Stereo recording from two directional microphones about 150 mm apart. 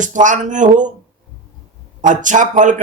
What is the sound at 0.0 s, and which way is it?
Speech, 55° right (ahead or behind).